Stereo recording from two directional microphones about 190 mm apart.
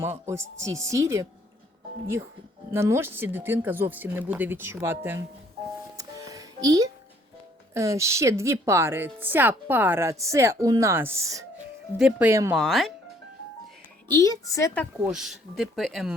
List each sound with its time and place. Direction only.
0.0 s speech: 15° right (ahead or behind)
2.7 s speech: 15° right (ahead or behind)
6.0 s music: 20° right (ahead or behind)
7.7 s speech: 15° right (ahead or behind)
11.9 s speech: 5° right (ahead or behind)
12.3 s speech: 15° right (ahead or behind)
12.5 s speech: centre (ahead or behind)
14.1 s a woman's voice: 15° left (ahead or behind)
15.0 s speech: centre (ahead or behind)